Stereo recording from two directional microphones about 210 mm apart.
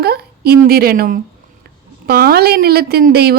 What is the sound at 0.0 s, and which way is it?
A woman's voice, 45° right (ahead or behind).